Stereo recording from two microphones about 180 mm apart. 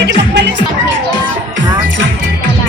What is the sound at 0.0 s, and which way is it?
Music, 70° right (ahead or behind).